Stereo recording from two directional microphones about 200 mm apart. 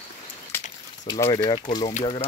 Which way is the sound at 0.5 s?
10° left (ahead or behind).